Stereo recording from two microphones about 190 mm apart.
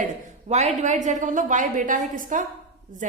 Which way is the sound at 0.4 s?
35° right (ahead or behind).